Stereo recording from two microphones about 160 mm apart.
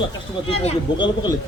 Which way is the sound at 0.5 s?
40° left (ahead or behind).